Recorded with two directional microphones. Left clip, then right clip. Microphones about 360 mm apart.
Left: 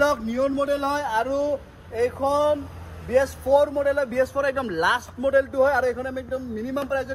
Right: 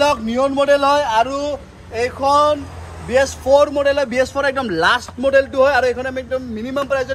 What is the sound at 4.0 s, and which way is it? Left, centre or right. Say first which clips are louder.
A man's voice: right 5 dB; right.